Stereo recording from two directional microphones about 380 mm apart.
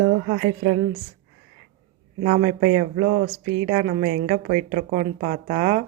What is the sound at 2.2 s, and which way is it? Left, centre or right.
A woman's voice, right.